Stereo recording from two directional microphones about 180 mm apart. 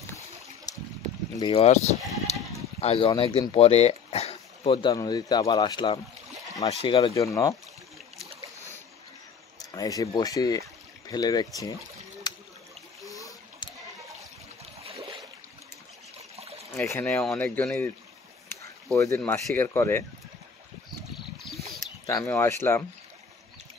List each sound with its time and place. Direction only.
0.7 s boat: 20° left (ahead or behind)
1.4 s speech: 35° left (ahead or behind)
2.3 s bleat: 35° left (ahead or behind)
2.8 s speech: 35° left (ahead or behind)
7.2 s speech: 15° left (ahead or behind)
9.6 s speech: 20° left (ahead or behind)
12.2 s a sound: 25° left (ahead or behind)
14.8 s boat: 35° right (ahead or behind)
16.3 s trickle: 35° right (ahead or behind)
16.7 s speech: 10° left (ahead or behind)
18.9 s speech: 15° left (ahead or behind)
22.0 s speech: 15° left (ahead or behind)